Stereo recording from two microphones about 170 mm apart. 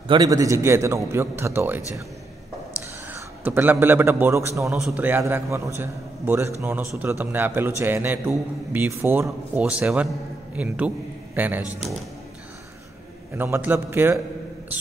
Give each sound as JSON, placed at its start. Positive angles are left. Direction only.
{"t": 0.1, "sound": "a man's voice", "side_deg": -20}
{"t": 3.1, "sound": "a man's voice", "side_deg": -10}
{"t": 4.7, "sound": "a man's voice", "side_deg": -5}
{"t": 13.4, "sound": "a man's voice", "side_deg": -15}